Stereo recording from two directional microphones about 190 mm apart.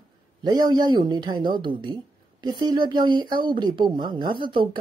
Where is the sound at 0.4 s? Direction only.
20° right (ahead or behind).